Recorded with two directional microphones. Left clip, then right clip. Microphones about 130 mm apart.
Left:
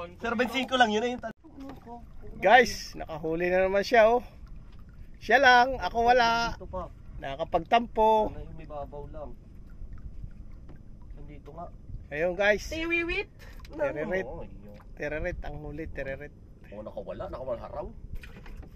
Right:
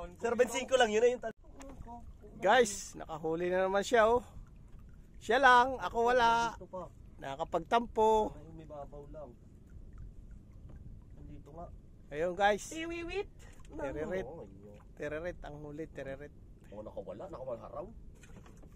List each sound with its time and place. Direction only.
0.2 s speech: 20° right (ahead or behind)
2.4 s speech: 10° left (ahead or behind)
12.1 s speech: 10° left (ahead or behind)
13.7 s speech: 20° left (ahead or behind); by 17.6 s centre (ahead or behind)